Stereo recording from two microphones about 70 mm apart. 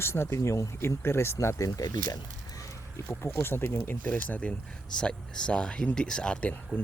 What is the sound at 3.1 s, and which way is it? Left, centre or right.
Speech, left.